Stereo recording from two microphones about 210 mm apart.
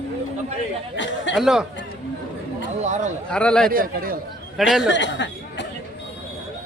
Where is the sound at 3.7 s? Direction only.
45° right (ahead or behind).